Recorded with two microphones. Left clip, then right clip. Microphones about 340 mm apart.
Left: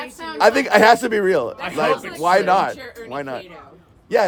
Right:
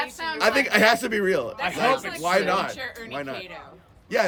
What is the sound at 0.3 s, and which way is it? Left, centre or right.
A man's voice, centre.